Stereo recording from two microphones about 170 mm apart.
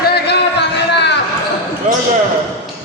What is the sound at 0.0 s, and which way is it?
Music, 70° left (ahead or behind).